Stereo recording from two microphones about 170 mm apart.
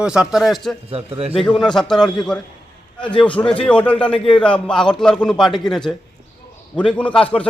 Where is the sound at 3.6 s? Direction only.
5° left (ahead or behind).